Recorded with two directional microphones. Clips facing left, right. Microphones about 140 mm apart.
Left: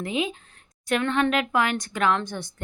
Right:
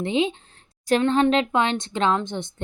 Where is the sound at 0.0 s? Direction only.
30° right (ahead or behind).